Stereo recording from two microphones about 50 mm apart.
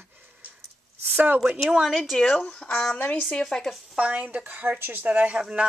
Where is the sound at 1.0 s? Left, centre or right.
Right.